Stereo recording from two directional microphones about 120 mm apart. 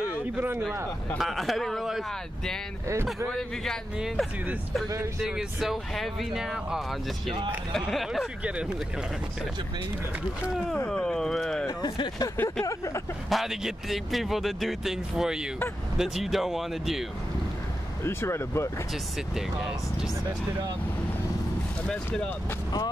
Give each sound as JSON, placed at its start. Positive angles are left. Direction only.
{"t": 1.1, "sound": "speech", "side_deg": 0}
{"t": 10.9, "sound": "a sound", "side_deg": 5}
{"t": 11.6, "sound": "speech", "side_deg": 35}
{"t": 13.3, "sound": "speech", "side_deg": -5}
{"t": 18.0, "sound": "speech", "side_deg": 20}
{"t": 19.3, "sound": "speech", "side_deg": -5}
{"t": 21.8, "sound": "speech", "side_deg": 10}